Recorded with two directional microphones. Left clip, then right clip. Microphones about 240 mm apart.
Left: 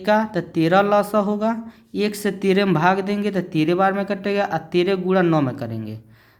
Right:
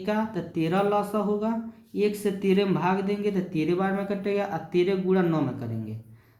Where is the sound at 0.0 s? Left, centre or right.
Left.